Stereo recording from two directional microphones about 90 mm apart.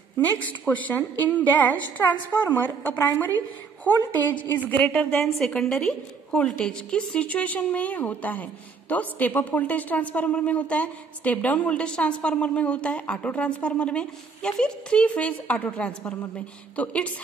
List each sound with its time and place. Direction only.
0.2 s a woman's voice: 20° left (ahead or behind)
5.2 s a woman's voice: 5° left (ahead or behind)